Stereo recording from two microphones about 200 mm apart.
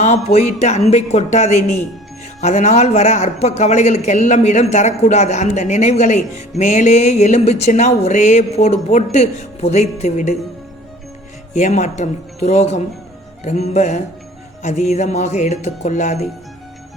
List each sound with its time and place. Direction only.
0.0 s speech: 35° left (ahead or behind)
11.5 s speech: 35° left (ahead or behind)